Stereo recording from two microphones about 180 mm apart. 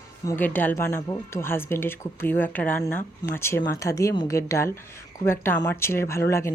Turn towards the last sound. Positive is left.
turn(degrees=15)  # may be behind; listen again after turning